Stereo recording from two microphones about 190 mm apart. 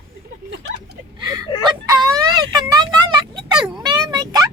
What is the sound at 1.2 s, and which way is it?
Speech, 20° right (ahead or behind).